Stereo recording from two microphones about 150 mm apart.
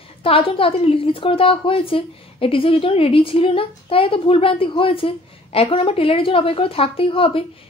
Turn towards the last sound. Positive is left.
turn(degrees=35)  # may be behind; listen again after turning